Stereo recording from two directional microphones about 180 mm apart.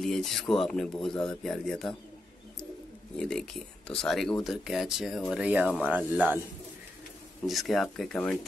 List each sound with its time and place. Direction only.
0.0 s speech: centre (ahead or behind)
3.2 s speech: 5° left (ahead or behind)
7.4 s speech: centre (ahead or behind)